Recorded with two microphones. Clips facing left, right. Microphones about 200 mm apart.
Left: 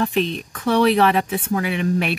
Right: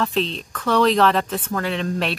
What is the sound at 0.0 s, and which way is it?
Speech, 15° left (ahead or behind).